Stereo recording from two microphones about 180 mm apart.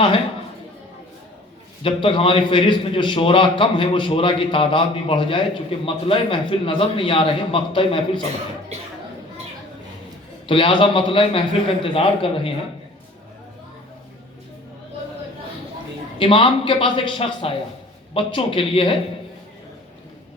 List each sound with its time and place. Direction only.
1.8 s a man's voice: 30° left (ahead or behind)
10.4 s a man's voice: 30° left (ahead or behind)
16.1 s a man's voice: 30° left (ahead or behind)